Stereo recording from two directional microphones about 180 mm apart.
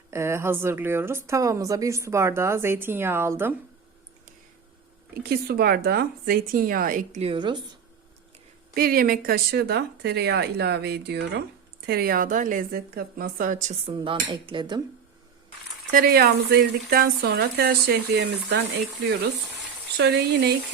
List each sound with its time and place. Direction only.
0.1 s speech: 15° right (ahead or behind)
5.2 s speech: 60° right (ahead or behind)
7.2 s speech: 30° right (ahead or behind)
8.7 s speech: 55° right (ahead or behind)
11.9 s a woman's voice: 55° right (ahead or behind)
13.8 s speech: 30° right (ahead or behind)
15.9 s speech: 55° right (ahead or behind); by 18.6 s 70° right (ahead or behind)
20.0 s speech: 70° right (ahead or behind)